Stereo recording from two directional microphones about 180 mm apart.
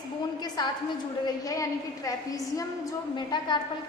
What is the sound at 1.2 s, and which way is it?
A woman's voice, 20° left (ahead or behind).